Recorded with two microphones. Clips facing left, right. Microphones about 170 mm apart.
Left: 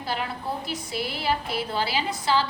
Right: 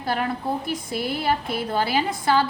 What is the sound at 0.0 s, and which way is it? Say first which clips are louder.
A woman's voice: right 5 dB; 50° right (ahead or behind).